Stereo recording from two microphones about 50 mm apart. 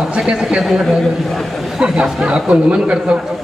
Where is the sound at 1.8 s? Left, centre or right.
Centre.